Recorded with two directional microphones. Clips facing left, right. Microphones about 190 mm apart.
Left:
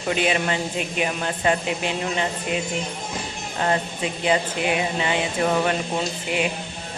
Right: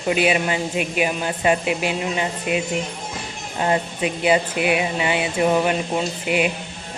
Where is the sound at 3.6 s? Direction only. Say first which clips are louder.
Right 3 dB; 15° right (ahead or behind).